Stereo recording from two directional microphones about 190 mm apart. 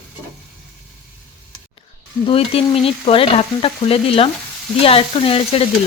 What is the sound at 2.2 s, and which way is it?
Frying, 30° left (ahead or behind).